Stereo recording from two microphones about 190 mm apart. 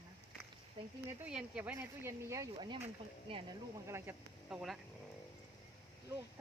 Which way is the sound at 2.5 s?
25° right (ahead or behind).